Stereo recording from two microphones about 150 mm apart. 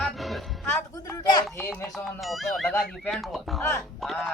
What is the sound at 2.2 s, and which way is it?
A man's voice, centre (ahead or behind).